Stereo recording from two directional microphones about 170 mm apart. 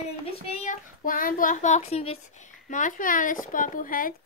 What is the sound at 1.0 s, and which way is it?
A child's voice, 55° left (ahead or behind).